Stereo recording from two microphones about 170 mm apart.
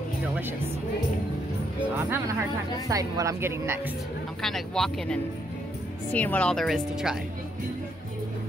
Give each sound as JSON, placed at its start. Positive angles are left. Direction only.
{"t": 2.0, "sound": "speech", "side_deg": -10}
{"t": 4.4, "sound": "speech", "side_deg": 0}